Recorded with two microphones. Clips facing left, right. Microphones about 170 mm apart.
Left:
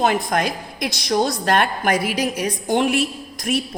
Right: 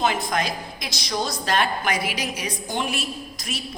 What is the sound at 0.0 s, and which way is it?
A woman's voice, 55° left (ahead or behind).